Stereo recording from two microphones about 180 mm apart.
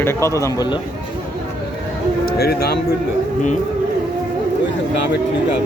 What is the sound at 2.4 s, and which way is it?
Speech, 60° left (ahead or behind).